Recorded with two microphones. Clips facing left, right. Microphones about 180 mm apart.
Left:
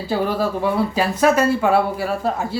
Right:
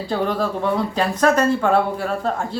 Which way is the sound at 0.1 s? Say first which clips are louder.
Left 1 dB; 5° left (ahead or behind).